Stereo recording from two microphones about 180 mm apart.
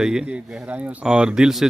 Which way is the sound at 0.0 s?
5° right (ahead or behind).